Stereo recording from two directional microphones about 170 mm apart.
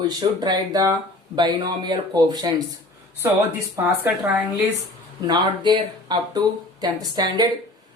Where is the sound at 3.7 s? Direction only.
10° right (ahead or behind).